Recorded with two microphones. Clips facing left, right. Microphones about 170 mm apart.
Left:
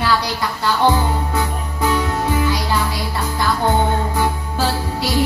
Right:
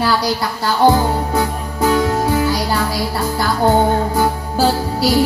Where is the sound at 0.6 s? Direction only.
40° right (ahead or behind).